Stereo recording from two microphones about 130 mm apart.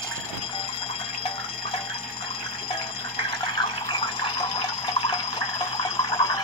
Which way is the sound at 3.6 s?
40° left (ahead or behind).